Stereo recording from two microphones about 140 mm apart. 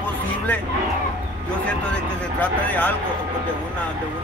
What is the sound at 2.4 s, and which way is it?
Speech, 10° left (ahead or behind).